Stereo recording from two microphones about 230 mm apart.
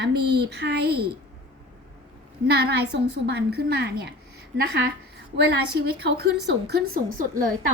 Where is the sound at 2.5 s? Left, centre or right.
Right.